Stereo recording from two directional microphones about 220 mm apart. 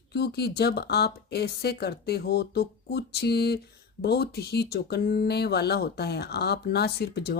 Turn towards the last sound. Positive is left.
turn(degrees=45)  # may be behind; listen again after turning